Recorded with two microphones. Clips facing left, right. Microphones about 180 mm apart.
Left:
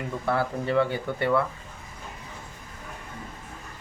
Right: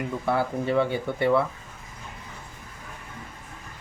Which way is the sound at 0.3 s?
15° right (ahead or behind).